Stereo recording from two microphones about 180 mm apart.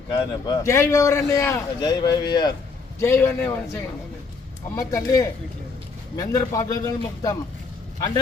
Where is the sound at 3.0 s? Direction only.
10° left (ahead or behind).